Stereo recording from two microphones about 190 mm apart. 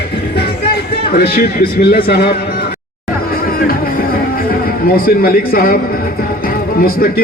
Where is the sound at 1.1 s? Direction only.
55° left (ahead or behind).